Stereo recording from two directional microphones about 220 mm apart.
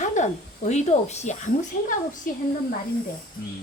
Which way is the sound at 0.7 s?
30° left (ahead or behind).